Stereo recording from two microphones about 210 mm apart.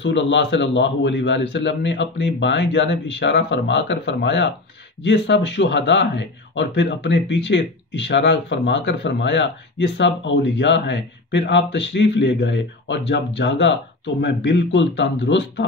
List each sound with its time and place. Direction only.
0.0 s speech: 60° left (ahead or behind)